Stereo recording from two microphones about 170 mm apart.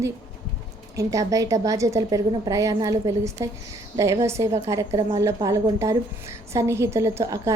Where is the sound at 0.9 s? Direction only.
20° right (ahead or behind).